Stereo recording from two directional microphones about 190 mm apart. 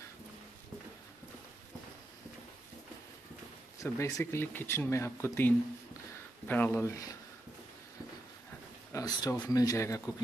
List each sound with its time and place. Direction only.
3.8 s speech: 15° left (ahead or behind)
8.9 s speech: 20° left (ahead or behind)